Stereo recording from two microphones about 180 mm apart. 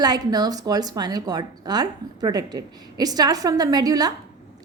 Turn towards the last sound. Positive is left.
turn(degrees=-20)  # may be behind; listen again after turning